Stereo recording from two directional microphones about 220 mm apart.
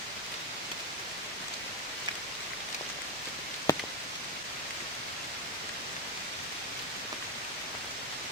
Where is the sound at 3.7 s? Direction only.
15° left (ahead or behind).